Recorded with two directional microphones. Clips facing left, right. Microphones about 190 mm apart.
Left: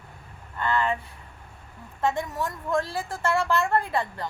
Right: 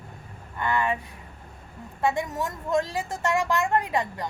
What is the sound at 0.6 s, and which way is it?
Speech, 15° right (ahead or behind).